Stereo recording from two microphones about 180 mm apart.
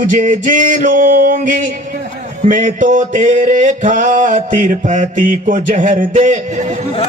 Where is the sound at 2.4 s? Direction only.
45° right (ahead or behind).